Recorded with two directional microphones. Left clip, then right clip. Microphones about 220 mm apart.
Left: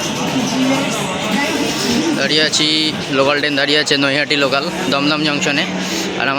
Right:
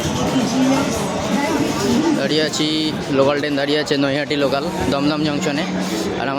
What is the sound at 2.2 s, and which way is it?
Speech, 15° right (ahead or behind).